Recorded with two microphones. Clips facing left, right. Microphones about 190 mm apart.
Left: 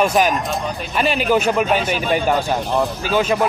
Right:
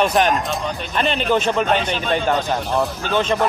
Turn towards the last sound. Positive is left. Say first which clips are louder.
# left 2 dB
turn(degrees=10)  # may be behind; listen again after turning